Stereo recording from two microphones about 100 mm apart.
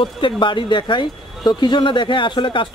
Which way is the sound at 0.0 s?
55° left (ahead or behind).